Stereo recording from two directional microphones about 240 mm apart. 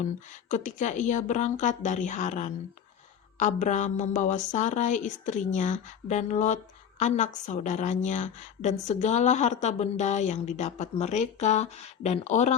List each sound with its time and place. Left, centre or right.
0.0 s a woman's voice: left